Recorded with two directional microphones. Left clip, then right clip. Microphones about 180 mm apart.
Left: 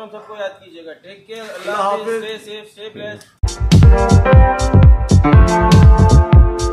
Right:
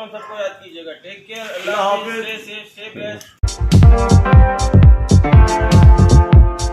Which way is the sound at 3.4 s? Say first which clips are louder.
Left 1 dB; centre (ahead or behind).